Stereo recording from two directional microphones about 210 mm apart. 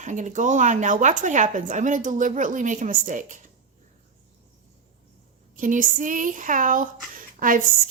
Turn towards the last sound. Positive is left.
turn(degrees=-40)  # may be behind; listen again after turning